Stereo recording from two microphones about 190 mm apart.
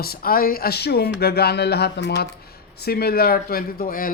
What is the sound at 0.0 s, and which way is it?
Speech, 50° left (ahead or behind).